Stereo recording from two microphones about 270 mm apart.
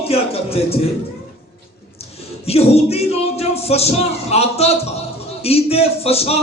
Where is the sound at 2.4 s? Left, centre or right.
Left.